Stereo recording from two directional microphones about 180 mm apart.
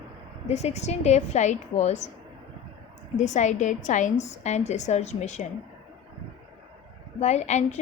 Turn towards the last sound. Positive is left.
turn(degrees=40)  # may be behind; listen again after turning